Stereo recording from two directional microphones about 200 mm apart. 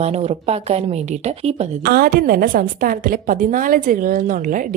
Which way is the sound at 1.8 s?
50° right (ahead or behind).